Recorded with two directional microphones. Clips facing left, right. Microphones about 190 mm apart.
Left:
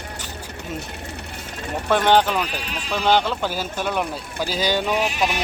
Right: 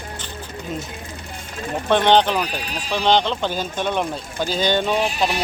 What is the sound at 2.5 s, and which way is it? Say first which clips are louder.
Speech: right 2 dB; 40° right (ahead or behind).